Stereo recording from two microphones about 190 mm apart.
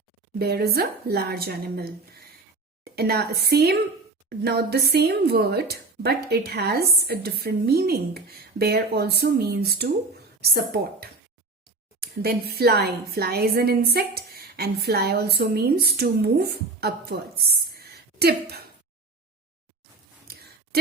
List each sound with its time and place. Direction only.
0.3 s a woman's voice: 55° right (ahead or behind)